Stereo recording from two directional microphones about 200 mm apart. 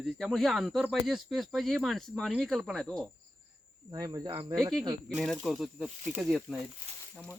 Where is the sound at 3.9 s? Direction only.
20° right (ahead or behind).